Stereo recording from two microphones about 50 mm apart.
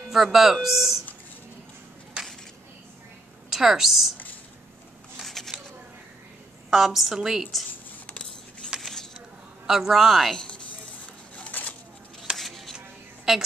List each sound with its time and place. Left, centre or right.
0.1 s speech: centre
3.4 s a woman's voice: centre
5.2 s shuffling cards: centre
6.7 s speech: centre
8.1 s a sound: centre
9.7 s a man's voice: centre
10.3 s speech: centre
11.3 s a sound: left
12.4 s music: centre
12.7 s a sound: centre